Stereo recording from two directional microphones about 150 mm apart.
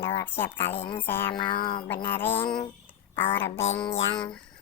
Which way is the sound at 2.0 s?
15° left (ahead or behind).